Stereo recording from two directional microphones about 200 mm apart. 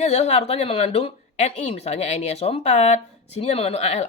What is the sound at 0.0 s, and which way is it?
Speech, 35° left (ahead or behind).